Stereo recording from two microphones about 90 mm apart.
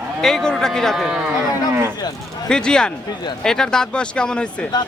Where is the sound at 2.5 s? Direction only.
10° left (ahead or behind).